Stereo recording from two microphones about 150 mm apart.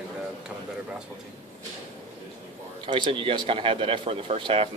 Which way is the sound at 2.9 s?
35° right (ahead or behind).